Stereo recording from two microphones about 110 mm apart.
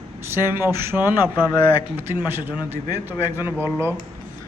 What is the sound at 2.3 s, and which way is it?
A man's voice, 20° right (ahead or behind).